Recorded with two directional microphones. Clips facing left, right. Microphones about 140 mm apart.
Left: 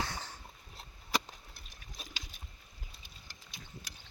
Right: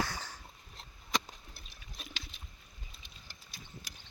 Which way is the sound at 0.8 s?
5° left (ahead or behind).